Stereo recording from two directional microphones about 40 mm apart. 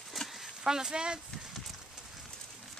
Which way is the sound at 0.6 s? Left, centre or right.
Centre.